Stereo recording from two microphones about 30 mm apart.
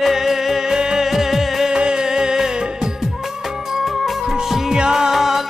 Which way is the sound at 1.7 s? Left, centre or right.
Right.